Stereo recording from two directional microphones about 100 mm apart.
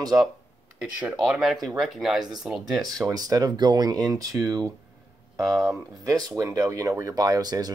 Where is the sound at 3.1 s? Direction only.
40° right (ahead or behind).